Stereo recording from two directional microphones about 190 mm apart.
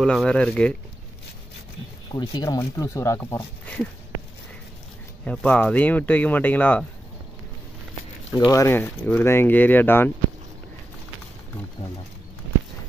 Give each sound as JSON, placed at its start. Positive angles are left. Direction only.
{"t": 0.0, "sound": "speech", "side_deg": 5}
{"t": 2.1, "sound": "speech", "side_deg": 20}
{"t": 5.2, "sound": "speech", "side_deg": 5}
{"t": 8.4, "sound": "speech", "side_deg": 15}